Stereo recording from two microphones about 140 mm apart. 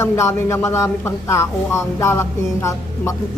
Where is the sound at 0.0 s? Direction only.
20° left (ahead or behind).